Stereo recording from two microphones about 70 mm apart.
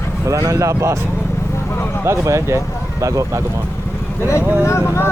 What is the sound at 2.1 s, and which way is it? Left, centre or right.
Speech, right.